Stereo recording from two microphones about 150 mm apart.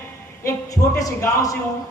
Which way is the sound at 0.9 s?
20° left (ahead or behind).